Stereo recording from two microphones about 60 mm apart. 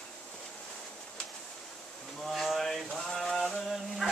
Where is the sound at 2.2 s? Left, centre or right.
Centre.